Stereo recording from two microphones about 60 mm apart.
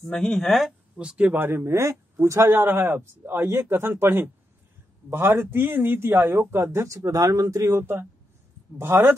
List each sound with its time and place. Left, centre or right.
0.1 s speech: centre
0.9 s speech: centre
1.4 s a man's voice: right
7.0 s speech: right
7.6 s a man's voice: right